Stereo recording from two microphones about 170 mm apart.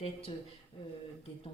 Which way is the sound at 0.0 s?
35° left (ahead or behind).